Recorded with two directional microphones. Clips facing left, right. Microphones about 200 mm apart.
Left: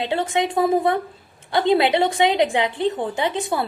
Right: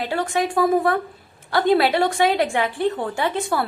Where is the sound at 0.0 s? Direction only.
20° left (ahead or behind).